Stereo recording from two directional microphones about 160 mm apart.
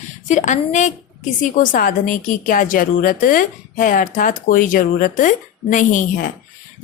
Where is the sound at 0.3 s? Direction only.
50° left (ahead or behind).